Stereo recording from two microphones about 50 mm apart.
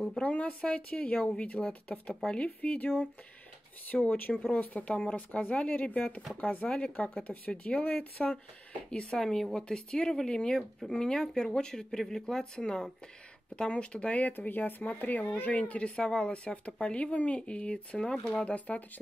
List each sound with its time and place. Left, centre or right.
0.2 s speech: left
6.7 s speech: left
8.2 s speech: centre; by 15.5 s left
15.5 s speech: left